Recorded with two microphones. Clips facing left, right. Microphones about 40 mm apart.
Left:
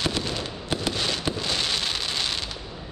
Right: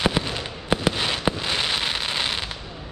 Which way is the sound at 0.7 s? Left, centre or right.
Right.